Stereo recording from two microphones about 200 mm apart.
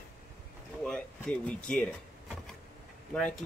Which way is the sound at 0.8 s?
5° left (ahead or behind).